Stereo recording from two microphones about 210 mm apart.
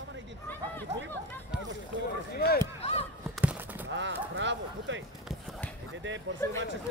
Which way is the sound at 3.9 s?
60° right (ahead or behind).